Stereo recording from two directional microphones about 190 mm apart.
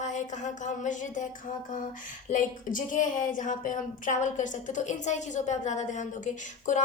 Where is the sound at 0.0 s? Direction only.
40° left (ahead or behind).